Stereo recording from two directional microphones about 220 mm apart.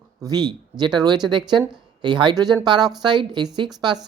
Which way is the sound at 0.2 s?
20° right (ahead or behind).